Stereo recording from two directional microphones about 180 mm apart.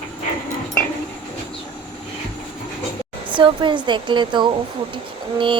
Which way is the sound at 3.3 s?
25° right (ahead or behind).